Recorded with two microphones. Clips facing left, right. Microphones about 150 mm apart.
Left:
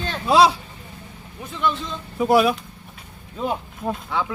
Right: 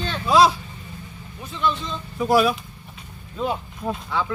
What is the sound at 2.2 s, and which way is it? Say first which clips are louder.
Speech: left 2 dB; 20° left (ahead or behind).